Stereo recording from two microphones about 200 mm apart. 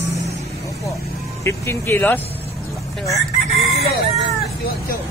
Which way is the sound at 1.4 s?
10° left (ahead or behind).